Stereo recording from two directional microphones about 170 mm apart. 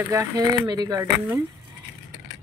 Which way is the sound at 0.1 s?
20° right (ahead or behind).